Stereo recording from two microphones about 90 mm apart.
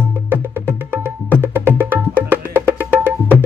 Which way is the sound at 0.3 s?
25° right (ahead or behind).